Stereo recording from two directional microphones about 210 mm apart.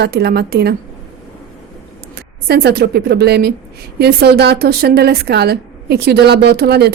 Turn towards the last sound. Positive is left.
turn(degrees=-50)  # may be behind; listen again after turning